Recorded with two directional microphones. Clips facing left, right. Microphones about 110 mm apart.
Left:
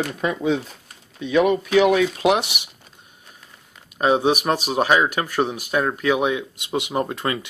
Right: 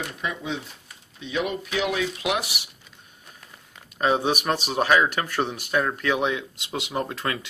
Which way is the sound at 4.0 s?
10° left (ahead or behind).